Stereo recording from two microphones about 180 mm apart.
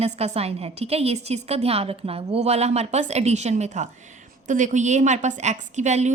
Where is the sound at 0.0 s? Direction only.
35° right (ahead or behind).